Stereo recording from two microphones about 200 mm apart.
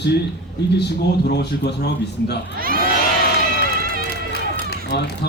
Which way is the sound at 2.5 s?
45° right (ahead or behind).